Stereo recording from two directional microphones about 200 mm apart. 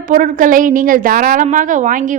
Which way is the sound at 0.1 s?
40° right (ahead or behind).